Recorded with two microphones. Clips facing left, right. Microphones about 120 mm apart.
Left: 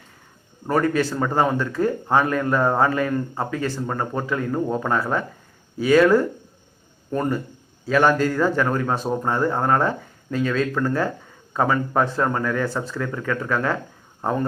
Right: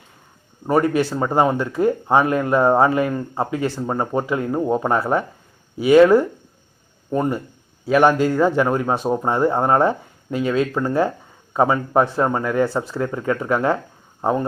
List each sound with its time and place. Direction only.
0.7 s a man's voice: 20° right (ahead or behind)